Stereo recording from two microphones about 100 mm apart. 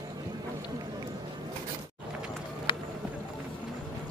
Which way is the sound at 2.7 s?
50° left (ahead or behind).